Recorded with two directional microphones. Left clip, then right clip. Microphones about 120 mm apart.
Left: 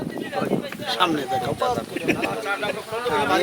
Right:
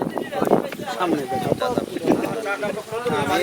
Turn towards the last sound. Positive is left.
turn(degrees=15)  # may be behind; listen again after turning